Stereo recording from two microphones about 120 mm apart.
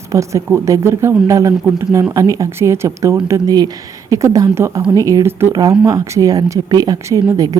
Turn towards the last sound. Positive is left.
turn(degrees=-30)  # may be behind; listen again after turning